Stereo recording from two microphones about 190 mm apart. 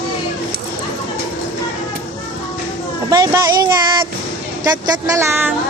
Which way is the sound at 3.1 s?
20° right (ahead or behind).